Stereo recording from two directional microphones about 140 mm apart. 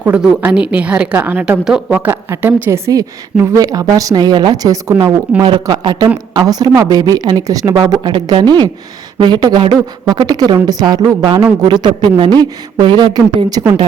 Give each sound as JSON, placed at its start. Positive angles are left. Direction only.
{"t": 0.0, "sound": "a woman's voice", "side_deg": -10}